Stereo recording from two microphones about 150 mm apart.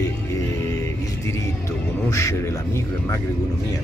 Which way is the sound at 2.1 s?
20° left (ahead or behind).